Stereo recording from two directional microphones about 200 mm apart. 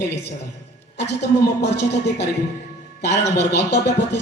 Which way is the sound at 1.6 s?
55° left (ahead or behind).